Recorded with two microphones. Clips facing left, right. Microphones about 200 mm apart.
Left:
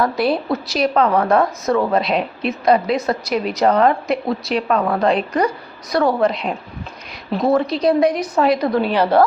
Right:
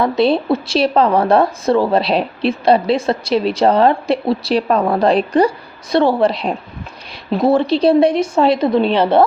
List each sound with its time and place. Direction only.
0.0 s a woman's voice: 25° right (ahead or behind)